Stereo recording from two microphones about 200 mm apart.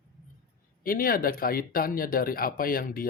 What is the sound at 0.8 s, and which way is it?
Speech, 45° left (ahead or behind).